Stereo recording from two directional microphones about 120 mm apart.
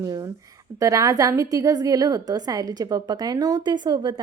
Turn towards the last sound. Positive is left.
turn(degrees=-35)  # may be behind; listen again after turning